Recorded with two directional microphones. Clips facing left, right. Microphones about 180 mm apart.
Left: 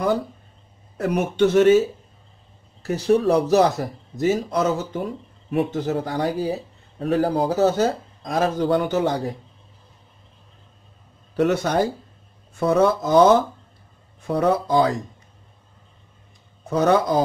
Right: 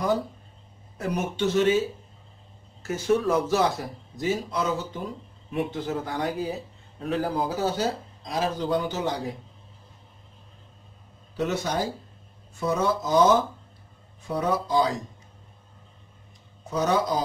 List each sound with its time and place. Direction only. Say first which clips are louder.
0.9 s speech: left 7 dB; 65° left (ahead or behind)
2.8 s a man's voice: left 5 dB; 35° left (ahead or behind)
11.3 s speech: left 7 dB; 60° left (ahead or behind)
16.7 s speech: left 6 dB; 55° left (ahead or behind)